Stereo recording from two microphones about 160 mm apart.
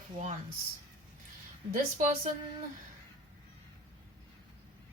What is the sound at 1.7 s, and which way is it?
Speech, 55° right (ahead or behind).